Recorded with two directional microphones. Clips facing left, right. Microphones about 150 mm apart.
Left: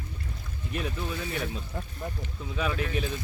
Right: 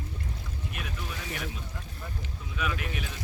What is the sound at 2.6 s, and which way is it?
Speech, 30° left (ahead or behind).